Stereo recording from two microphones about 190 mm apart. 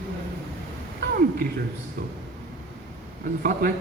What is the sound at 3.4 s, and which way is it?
Speech, 50° right (ahead or behind).